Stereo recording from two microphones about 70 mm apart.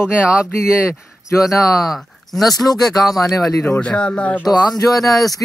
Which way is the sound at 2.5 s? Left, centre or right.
Left.